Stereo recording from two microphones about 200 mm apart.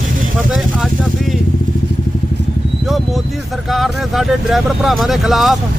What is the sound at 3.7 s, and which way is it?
Speech, centre (ahead or behind).